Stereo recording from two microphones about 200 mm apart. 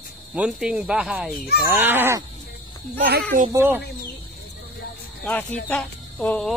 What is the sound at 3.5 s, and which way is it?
Speech, 10° right (ahead or behind).